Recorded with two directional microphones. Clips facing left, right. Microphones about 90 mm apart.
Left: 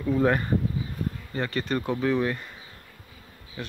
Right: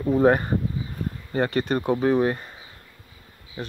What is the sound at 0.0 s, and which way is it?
Speech, 35° right (ahead or behind).